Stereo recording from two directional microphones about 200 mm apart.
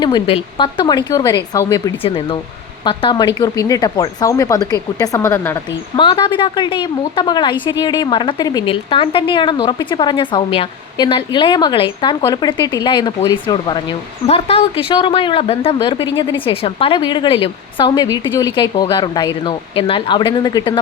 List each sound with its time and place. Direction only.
0.0 s a woman's voice: 25° left (ahead or behind)